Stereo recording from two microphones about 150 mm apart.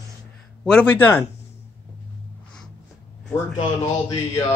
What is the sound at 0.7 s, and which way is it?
Speech, 15° left (ahead or behind).